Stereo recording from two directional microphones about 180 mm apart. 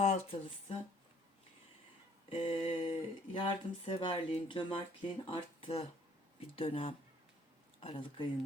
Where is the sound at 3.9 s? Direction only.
30° left (ahead or behind).